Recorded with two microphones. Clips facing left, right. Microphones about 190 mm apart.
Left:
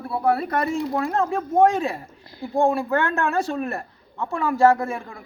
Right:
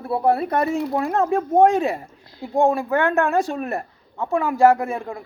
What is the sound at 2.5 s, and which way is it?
A man's voice, 15° right (ahead or behind).